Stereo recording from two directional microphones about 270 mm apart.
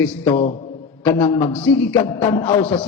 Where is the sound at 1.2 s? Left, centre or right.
Centre.